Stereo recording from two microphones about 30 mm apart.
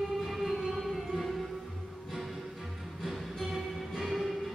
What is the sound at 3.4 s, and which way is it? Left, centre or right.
Music, centre.